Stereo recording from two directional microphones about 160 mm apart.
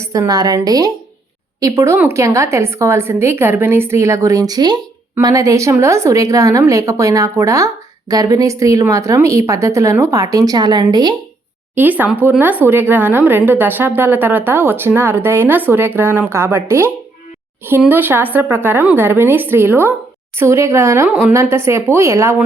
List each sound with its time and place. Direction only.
0.0 s a woman's voice: 20° right (ahead or behind)
11.7 s speech: 10° right (ahead or behind)